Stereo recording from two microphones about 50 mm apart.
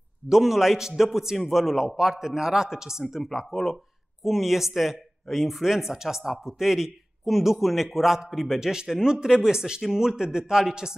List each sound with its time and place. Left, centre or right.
0.3 s a man's voice: centre